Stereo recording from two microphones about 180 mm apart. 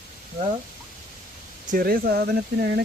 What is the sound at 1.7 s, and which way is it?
Speech, 50° right (ahead or behind).